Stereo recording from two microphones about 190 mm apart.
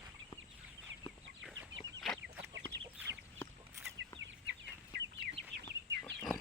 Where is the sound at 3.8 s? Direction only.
15° right (ahead or behind).